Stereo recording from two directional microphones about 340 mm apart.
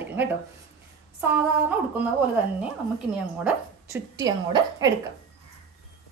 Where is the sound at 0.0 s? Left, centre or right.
Centre.